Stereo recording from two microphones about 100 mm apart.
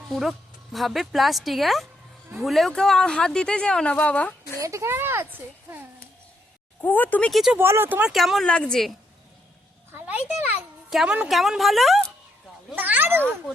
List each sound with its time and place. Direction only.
0.1 s speech: centre (ahead or behind)
4.6 s a child's voice: 30° right (ahead or behind)
6.8 s speech: 15° left (ahead or behind)
7.3 s speech: centre (ahead or behind)
7.6 s a child's voice: 25° right (ahead or behind)
8.0 s speech: centre (ahead or behind)
10.8 s a woman's voice: 5° right (ahead or behind)
12.7 s a sound: 20° right (ahead or behind)